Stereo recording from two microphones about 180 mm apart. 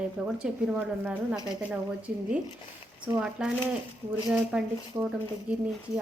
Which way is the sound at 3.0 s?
5° right (ahead or behind).